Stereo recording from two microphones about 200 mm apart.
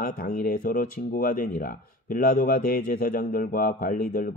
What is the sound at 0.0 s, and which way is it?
Speech, 45° left (ahead or behind).